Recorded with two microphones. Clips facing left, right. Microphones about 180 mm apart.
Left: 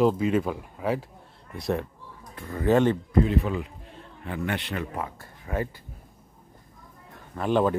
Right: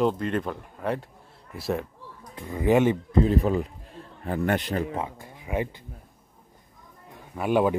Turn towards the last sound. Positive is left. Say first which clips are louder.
# right 1 dB
turn(degrees=-10)  # may be behind; listen again after turning